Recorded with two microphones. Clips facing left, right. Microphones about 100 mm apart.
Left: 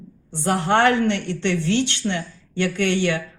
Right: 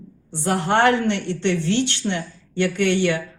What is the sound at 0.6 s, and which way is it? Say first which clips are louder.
Speech: even; 35° right (ahead or behind).